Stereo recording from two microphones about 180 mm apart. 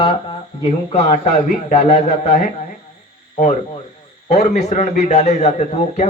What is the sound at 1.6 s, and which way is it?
Speech, 40° left (ahead or behind).